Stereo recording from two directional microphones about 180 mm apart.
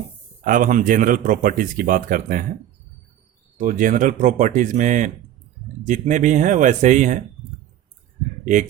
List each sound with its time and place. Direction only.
0.4 s speech: 50° right (ahead or behind)
3.6 s speech: 45° right (ahead or behind)